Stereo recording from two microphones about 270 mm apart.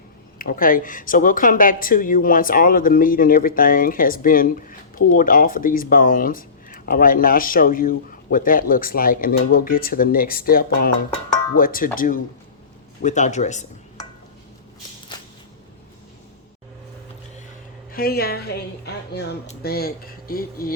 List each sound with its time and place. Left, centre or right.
0.3 s speech: left
17.9 s speech: left